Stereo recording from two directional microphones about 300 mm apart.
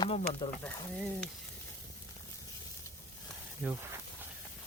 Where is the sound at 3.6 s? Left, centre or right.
Centre.